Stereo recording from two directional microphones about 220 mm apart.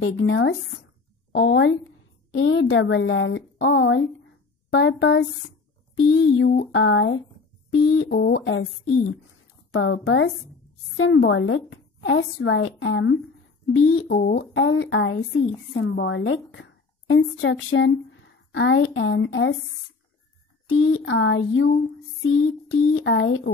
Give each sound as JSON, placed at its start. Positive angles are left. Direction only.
{"t": 0.0, "sound": "a woman's voice", "side_deg": 60}
{"t": 9.7, "sound": "a woman's voice", "side_deg": 55}
{"t": 20.6, "sound": "a woman's voice", "side_deg": 65}